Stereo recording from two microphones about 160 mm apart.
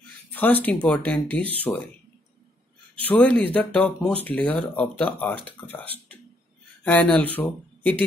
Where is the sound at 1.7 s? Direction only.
20° left (ahead or behind).